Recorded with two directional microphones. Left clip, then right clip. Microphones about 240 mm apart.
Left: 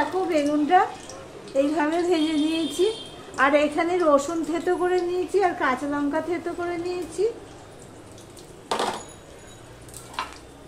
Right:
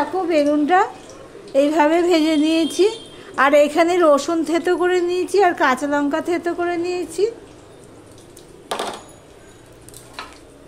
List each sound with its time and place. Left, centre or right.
0.3 s a woman's voice: right